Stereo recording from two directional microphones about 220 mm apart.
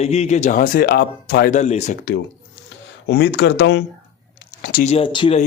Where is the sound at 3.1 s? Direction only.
50° left (ahead or behind).